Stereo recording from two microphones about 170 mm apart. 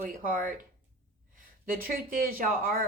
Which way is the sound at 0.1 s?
55° right (ahead or behind).